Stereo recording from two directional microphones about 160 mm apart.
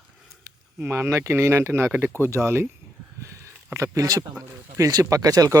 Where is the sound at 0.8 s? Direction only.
15° right (ahead or behind).